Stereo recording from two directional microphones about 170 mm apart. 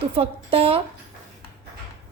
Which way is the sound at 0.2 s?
35° right (ahead or behind).